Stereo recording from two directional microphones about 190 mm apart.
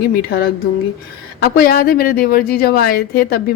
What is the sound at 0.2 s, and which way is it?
A woman's voice, 55° left (ahead or behind).